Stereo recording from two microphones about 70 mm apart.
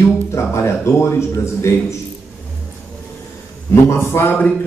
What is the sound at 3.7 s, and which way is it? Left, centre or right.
Speech, left.